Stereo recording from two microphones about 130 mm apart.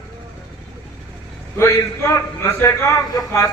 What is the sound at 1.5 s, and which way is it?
A man's voice, 20° left (ahead or behind).